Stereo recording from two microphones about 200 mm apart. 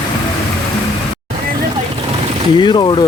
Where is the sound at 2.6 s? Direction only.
20° left (ahead or behind).